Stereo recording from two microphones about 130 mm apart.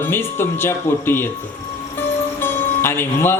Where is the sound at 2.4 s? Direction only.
15° left (ahead or behind).